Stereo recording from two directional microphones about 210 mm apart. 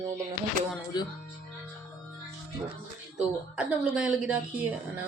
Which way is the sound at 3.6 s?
5° right (ahead or behind).